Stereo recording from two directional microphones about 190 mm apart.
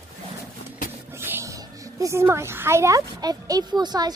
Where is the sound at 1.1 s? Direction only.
15° right (ahead or behind).